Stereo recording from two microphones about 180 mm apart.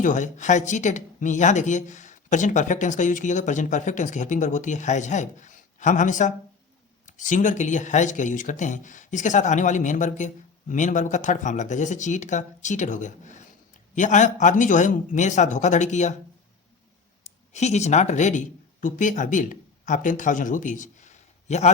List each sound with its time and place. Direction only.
0.0 s speech: 45° left (ahead or behind)
17.5 s speech: 40° left (ahead or behind)